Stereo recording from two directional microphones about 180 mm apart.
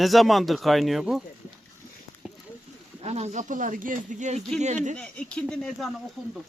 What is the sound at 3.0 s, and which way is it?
Speech, 35° right (ahead or behind).